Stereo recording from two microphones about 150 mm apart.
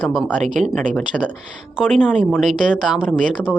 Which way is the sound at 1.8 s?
Centre (ahead or behind).